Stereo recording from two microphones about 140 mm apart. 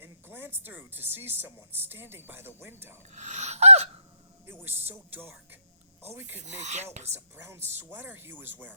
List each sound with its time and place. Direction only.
0.0 s speech: 15° right (ahead or behind)
3.1 s gasp: 55° right (ahead or behind)
4.6 s speech: 15° right (ahead or behind)
6.4 s filing: 55° right (ahead or behind)
7.1 s speech: 20° right (ahead or behind)